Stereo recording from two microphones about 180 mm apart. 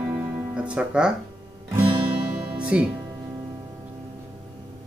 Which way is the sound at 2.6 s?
5° right (ahead or behind).